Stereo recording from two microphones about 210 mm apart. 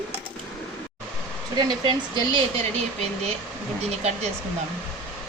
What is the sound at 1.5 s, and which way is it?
Speech, 20° right (ahead or behind).